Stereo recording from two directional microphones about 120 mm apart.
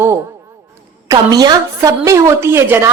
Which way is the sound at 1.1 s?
30° right (ahead or behind).